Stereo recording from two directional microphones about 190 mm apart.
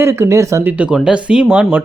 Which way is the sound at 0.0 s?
15° right (ahead or behind).